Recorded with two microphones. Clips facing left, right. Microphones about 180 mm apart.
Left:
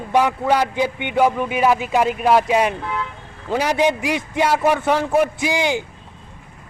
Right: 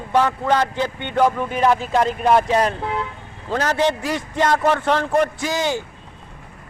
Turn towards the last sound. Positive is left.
turn(degrees=10)  # may be behind; listen again after turning